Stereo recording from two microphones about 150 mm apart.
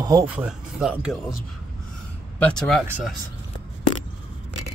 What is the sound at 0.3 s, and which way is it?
Speech, 5° right (ahead or behind).